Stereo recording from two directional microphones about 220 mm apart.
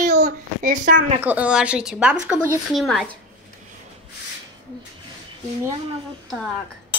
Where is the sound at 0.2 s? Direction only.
40° right (ahead or behind).